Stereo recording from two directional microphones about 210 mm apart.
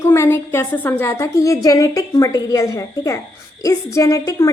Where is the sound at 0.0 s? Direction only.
10° left (ahead or behind).